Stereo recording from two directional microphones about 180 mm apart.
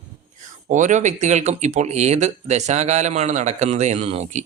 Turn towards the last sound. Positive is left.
turn(degrees=-40)  # may be behind; listen again after turning